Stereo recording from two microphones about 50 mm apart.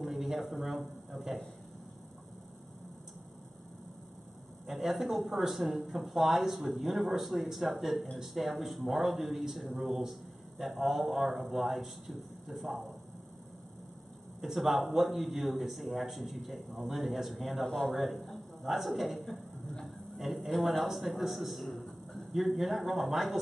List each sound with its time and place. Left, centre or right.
0.0 s a sound: centre
0.6 s a man's voice: centre
4.7 s a man's voice: centre
14.4 s a man's voice: centre
21.2 s a sound: centre
22.3 s a man's voice: centre